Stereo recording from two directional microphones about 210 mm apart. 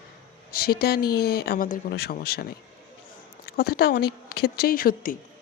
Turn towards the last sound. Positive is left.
turn(degrees=40)  # may be behind; listen again after turning